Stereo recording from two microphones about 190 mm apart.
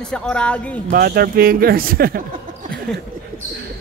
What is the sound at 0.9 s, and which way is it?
Speech, 50° right (ahead or behind).